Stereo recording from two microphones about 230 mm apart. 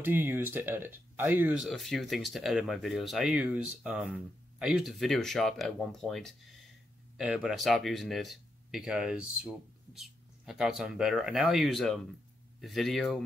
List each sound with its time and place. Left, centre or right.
0.0 s speech: centre